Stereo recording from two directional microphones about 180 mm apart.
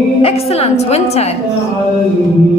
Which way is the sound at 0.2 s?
35° left (ahead or behind).